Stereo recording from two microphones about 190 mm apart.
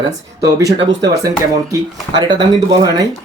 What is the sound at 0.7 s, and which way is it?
Speech, 20° right (ahead or behind).